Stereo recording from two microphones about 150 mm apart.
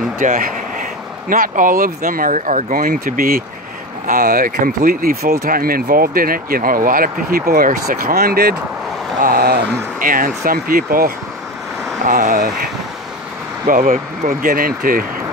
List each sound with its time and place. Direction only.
0.2 s speech: 65° right (ahead or behind)
12.0 s speech: 60° right (ahead or behind)
13.7 s speech: 60° right (ahead or behind)